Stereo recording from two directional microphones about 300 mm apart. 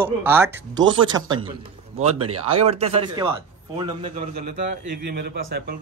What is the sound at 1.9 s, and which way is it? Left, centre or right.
Speech, right.